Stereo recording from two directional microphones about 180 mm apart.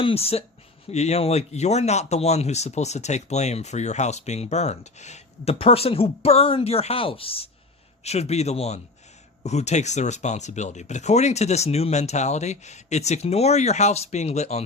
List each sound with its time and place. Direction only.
0.0 s speech: 35° left (ahead or behind)